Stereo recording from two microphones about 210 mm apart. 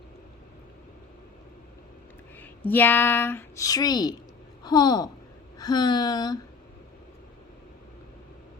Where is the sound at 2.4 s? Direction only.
10° left (ahead or behind).